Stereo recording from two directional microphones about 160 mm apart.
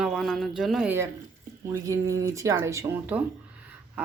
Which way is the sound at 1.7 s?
20° right (ahead or behind).